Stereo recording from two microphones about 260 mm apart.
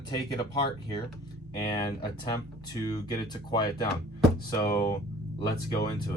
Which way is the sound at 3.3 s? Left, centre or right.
Centre.